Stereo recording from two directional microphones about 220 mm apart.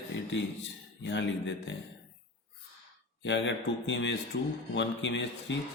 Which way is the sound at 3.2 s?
55° left (ahead or behind).